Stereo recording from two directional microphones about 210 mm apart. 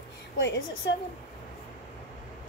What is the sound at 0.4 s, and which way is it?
Speech, 60° left (ahead or behind).